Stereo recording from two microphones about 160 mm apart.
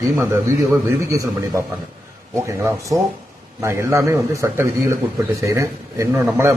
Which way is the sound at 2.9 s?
25° right (ahead or behind).